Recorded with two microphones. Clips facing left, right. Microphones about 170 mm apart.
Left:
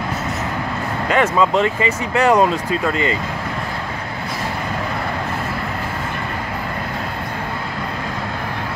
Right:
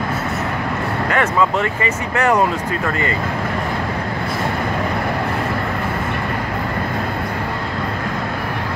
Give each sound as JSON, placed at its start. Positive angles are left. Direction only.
{"t": 1.1, "sound": "speech", "side_deg": 20}